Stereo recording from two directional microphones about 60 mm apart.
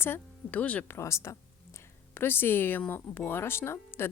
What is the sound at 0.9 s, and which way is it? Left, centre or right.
Speech, left.